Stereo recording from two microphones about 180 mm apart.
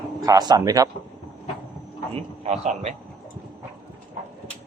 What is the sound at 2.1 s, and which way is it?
Speech, 35° right (ahead or behind).